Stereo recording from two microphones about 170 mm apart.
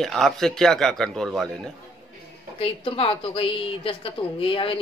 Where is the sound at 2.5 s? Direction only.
35° left (ahead or behind).